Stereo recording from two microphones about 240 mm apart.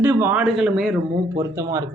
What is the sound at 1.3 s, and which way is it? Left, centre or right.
Speech, centre.